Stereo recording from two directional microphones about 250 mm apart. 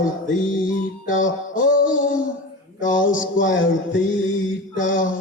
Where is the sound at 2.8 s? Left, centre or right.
Left.